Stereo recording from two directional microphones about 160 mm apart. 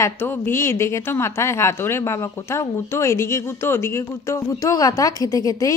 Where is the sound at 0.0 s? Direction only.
15° left (ahead or behind).